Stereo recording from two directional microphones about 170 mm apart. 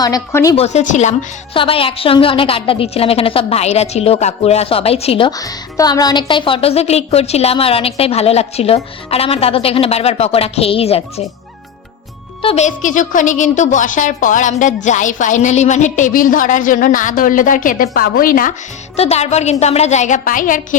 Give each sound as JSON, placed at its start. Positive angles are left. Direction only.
{"t": 0.0, "sound": "speech", "side_deg": 20}
{"t": 0.5, "sound": "speech", "side_deg": 40}
{"t": 1.5, "sound": "speech", "side_deg": 30}
{"t": 5.4, "sound": "speech", "side_deg": 20}
{"t": 12.4, "sound": "a woman's voice", "side_deg": 35}
{"t": 18.9, "sound": "speech", "side_deg": 40}